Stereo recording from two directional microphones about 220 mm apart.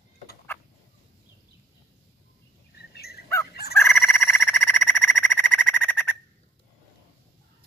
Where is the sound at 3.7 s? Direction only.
10° left (ahead or behind).